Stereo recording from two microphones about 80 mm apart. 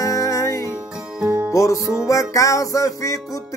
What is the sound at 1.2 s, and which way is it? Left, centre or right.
Music, right.